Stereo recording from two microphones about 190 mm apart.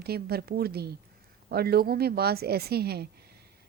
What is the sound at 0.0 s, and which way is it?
A woman's voice, 55° right (ahead or behind).